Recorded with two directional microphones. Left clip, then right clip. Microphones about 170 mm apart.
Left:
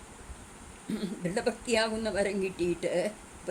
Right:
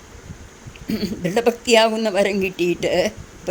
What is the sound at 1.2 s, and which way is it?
Speech, 50° right (ahead or behind).